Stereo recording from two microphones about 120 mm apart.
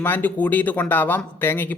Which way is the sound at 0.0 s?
15° left (ahead or behind).